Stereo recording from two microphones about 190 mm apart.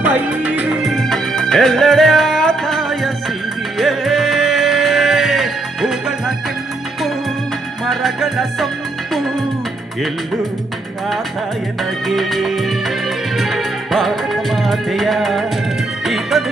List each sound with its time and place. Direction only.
0.0 s music: 10° right (ahead or behind)
7.9 s music: centre (ahead or behind)
11.8 s music: centre (ahead or behind)